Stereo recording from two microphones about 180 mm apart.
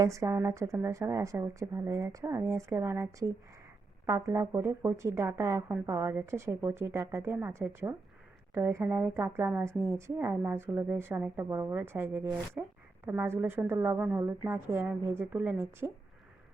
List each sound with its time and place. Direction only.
0.0 s speech: 15° right (ahead or behind)